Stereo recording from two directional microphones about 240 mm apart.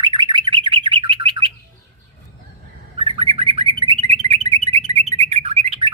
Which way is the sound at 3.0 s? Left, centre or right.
Right.